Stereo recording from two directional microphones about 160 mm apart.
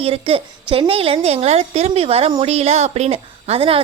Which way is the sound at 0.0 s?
35° right (ahead or behind).